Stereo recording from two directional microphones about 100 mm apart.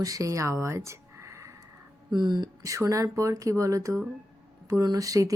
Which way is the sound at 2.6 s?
35° right (ahead or behind).